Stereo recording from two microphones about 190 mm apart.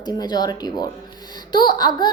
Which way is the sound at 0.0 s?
20° left (ahead or behind).